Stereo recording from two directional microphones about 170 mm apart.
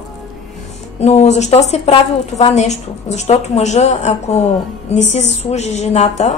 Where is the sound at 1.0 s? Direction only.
40° left (ahead or behind).